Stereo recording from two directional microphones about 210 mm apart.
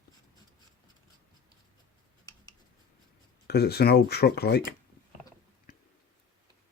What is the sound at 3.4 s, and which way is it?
Speech, 50° left (ahead or behind).